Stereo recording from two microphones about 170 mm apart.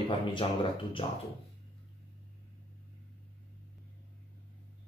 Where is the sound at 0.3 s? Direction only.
30° left (ahead or behind).